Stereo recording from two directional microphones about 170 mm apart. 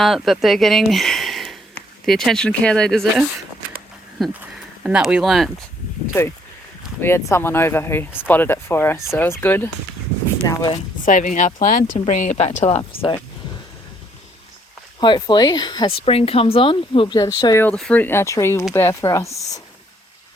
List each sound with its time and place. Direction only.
0.0 s speech: centre (ahead or behind)
7.0 s speech: 15° left (ahead or behind)
10.4 s speech: 20° left (ahead or behind)
11.0 s speech: 50° left (ahead or behind)
15.0 s speech: 25° left (ahead or behind)
17.6 s speech: 5° left (ahead or behind)